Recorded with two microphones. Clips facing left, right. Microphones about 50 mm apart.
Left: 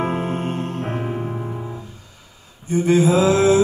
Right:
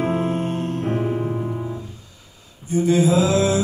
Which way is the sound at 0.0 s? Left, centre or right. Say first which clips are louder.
Right 1 dB; left.